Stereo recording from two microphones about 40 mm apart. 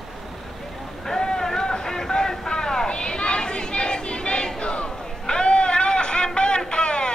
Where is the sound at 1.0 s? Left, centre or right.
Centre.